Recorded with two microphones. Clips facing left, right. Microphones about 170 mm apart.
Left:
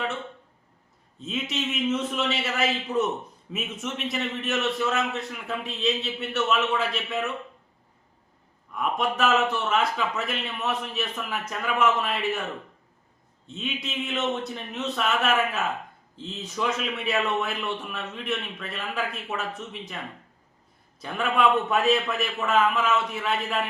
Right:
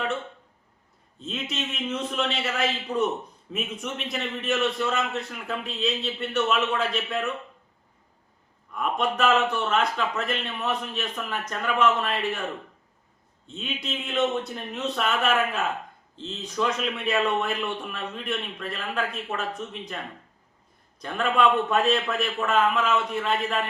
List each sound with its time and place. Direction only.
1.2 s a man's voice: 5° left (ahead or behind)
8.7 s a man's voice: centre (ahead or behind)
13.5 s a man's voice: centre (ahead or behind)
21.0 s a man's voice: centre (ahead or behind)